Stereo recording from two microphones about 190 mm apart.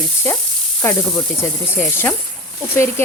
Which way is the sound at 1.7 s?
10° left (ahead or behind).